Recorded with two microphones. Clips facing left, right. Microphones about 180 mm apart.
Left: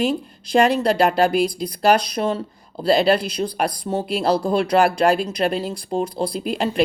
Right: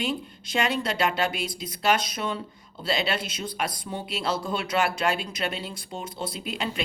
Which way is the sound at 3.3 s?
35° left (ahead or behind).